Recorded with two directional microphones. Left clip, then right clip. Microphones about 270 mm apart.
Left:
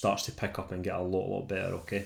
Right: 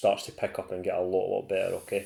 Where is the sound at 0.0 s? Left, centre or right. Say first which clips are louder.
Right 4 dB; centre.